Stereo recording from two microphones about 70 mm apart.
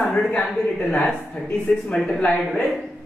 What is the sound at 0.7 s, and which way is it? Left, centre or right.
Speech, centre.